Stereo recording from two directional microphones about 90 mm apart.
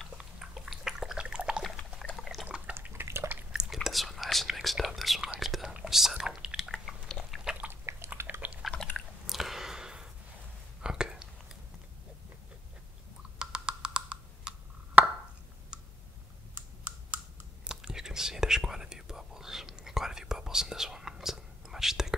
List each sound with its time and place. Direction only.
0.0 s a sound: 5° right (ahead or behind)
2.0 s water: centre (ahead or behind)
2.4 s water: 15° right (ahead or behind)
2.7 s water: 25° right (ahead or behind)
3.5 s whispering: 5° right (ahead or behind)
5.4 s chewing: 5° right (ahead or behind)
7.6 s a sound: 25° right (ahead or behind)
8.1 s dog: 20° right (ahead or behind)
8.9 s chewing: 5° right (ahead or behind)
10.8 s whispering: 10° right (ahead or behind)
13.4 s wood block: 10° right (ahead or behind)
15.7 s clicking: 5° right (ahead or behind)
16.5 s computer keyboard: 20° right (ahead or behind)